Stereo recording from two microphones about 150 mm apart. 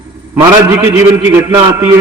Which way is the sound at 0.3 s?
15° right (ahead or behind).